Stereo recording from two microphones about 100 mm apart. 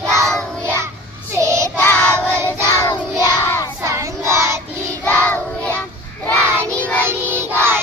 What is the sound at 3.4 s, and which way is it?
Child singing, 25° left (ahead or behind).